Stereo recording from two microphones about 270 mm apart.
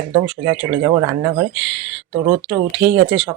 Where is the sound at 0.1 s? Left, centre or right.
Centre.